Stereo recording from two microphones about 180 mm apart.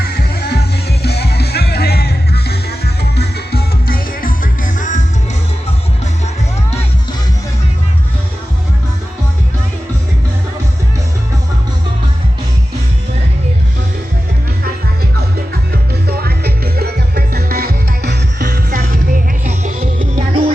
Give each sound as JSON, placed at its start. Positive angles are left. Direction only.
{"t": 0.0, "sound": "music", "side_deg": 60}
{"t": 16.0, "sound": "music", "side_deg": -60}